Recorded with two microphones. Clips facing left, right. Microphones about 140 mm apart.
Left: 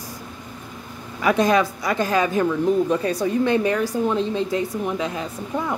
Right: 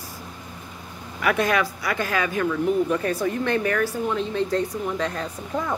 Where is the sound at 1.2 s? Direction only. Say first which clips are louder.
Left 4 dB; 25° left (ahead or behind).